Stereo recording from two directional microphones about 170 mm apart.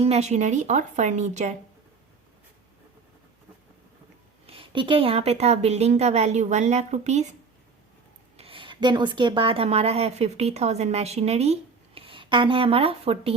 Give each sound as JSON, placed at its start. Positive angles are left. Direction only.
{"t": 0.0, "sound": "speech", "side_deg": -40}
{"t": 4.4, "sound": "a woman's voice", "side_deg": -30}
{"t": 8.4, "sound": "speech", "side_deg": -30}